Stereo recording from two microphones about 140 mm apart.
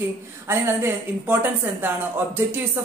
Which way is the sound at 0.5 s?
15° right (ahead or behind).